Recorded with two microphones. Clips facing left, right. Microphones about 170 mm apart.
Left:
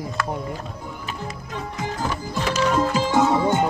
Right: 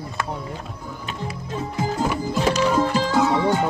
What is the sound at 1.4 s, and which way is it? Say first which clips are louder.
Music: right 5 dB; 30° right (ahead or behind).